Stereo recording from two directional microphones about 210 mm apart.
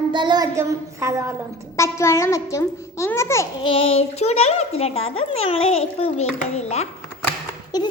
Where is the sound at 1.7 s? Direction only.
15° left (ahead or behind).